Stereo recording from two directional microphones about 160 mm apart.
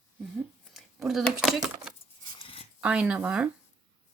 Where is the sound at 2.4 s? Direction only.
35° left (ahead or behind).